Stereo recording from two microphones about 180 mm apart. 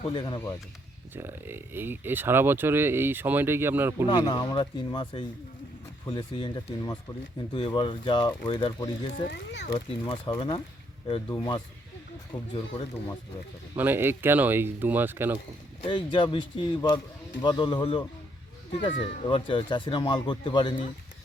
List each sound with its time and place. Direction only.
0.1 s speech: 25° left (ahead or behind)
1.1 s speech: 10° right (ahead or behind)
4.0 s speech: 25° left (ahead or behind)
9.1 s speech: 55° left (ahead or behind)
9.7 s speech: 25° left (ahead or behind)
13.7 s speech: 10° right (ahead or behind)
15.8 s speech: 25° left (ahead or behind)